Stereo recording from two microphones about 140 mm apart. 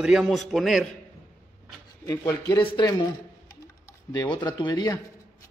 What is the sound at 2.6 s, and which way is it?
Speech, 35° left (ahead or behind).